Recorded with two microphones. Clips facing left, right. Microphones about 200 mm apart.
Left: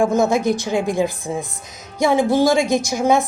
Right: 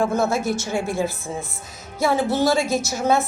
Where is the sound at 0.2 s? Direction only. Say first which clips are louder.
Left 5 dB; 15° left (ahead or behind).